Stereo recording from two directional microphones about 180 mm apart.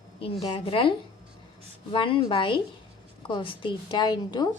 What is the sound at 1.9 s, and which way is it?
A woman's voice, 30° left (ahead or behind).